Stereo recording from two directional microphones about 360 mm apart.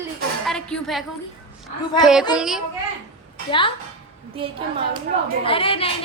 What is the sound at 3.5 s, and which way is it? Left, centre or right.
Speech, centre.